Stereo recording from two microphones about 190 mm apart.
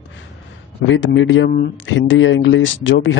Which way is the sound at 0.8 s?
80° left.